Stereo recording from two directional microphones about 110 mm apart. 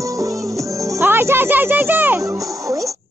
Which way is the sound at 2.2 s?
30° right (ahead or behind).